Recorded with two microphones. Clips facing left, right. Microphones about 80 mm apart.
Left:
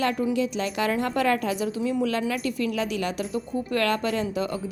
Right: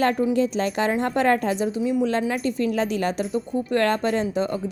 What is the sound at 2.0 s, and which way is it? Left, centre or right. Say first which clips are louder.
A woman's voice: right 3 dB; right.